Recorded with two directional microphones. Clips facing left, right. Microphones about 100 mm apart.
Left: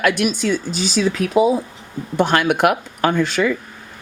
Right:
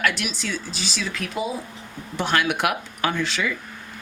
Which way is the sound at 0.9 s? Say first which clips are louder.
Left 13 dB; 40° left (ahead or behind).